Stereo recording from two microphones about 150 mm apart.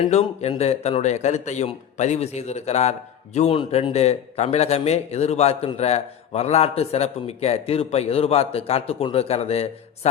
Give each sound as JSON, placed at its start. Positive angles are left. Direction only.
{"t": 0.0, "sound": "a man's voice", "side_deg": 45}